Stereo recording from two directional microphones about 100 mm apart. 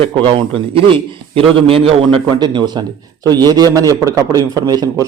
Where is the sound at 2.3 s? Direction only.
45° right (ahead or behind).